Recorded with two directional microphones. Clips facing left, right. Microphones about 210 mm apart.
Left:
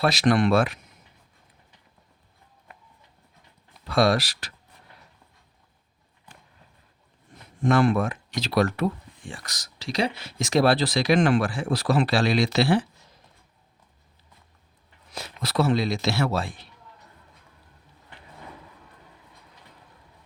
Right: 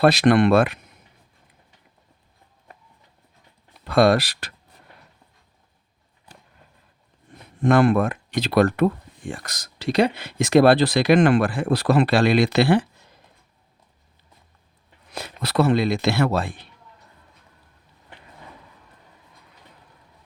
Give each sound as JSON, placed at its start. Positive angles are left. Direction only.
{"t": 0.0, "sound": "speech", "side_deg": -60}
{"t": 3.8, "sound": "speech", "side_deg": -55}
{"t": 7.6, "sound": "speech", "side_deg": -60}
{"t": 15.1, "sound": "speech", "side_deg": -60}